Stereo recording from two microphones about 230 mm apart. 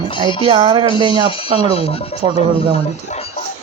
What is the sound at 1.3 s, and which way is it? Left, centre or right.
Speech, left.